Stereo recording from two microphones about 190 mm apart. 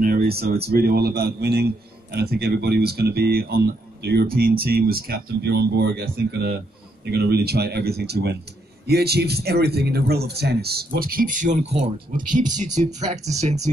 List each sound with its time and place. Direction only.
0.0 s a man's voice: 50° right (ahead or behind)